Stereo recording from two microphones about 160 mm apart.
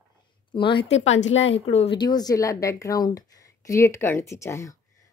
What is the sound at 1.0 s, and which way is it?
Speech, 45° left (ahead or behind).